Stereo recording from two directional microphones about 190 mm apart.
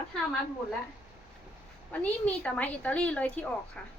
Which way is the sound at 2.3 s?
5° left (ahead or behind).